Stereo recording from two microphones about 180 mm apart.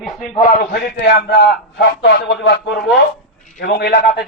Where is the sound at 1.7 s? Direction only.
80° left.